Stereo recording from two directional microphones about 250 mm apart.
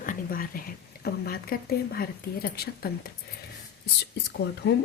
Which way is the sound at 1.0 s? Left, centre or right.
Left.